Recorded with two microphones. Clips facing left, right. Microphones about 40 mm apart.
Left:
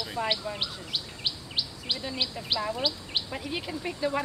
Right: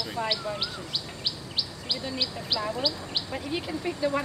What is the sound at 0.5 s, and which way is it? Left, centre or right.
Chirp, centre.